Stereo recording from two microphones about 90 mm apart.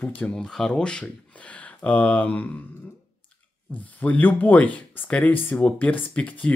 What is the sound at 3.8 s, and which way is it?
Speech, 20° left (ahead or behind).